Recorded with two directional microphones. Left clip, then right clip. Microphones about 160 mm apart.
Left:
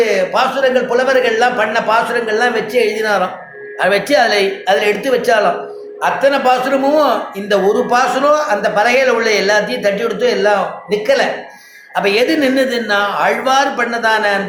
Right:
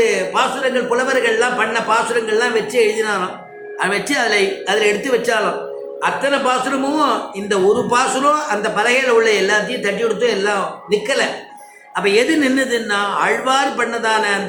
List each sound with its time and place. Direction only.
0.0 s a man's voice: 45° left (ahead or behind)